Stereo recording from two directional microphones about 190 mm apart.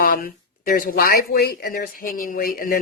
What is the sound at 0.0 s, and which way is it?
Speech, 50° left (ahead or behind).